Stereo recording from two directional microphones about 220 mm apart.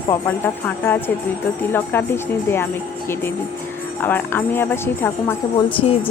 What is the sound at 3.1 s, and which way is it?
Jingle bell, 10° left (ahead or behind).